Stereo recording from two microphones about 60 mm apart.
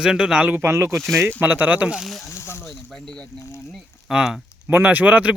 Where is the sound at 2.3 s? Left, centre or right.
Left.